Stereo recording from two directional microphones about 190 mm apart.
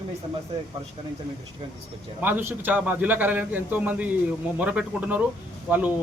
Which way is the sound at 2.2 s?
10° right (ahead or behind).